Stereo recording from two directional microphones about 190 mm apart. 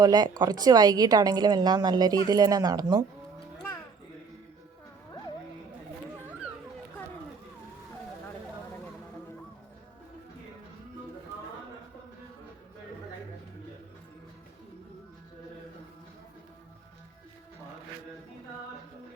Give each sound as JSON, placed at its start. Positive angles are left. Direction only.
{"t": 0.0, "sound": "a woman's voice", "side_deg": -20}